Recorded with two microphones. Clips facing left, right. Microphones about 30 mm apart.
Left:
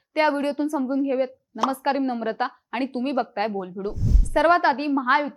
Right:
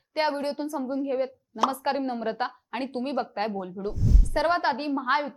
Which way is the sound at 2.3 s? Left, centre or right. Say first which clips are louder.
Left 3 dB; left.